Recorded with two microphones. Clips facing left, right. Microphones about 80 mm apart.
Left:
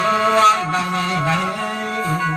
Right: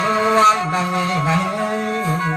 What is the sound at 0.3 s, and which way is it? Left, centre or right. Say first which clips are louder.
Music: right 1 dB; right.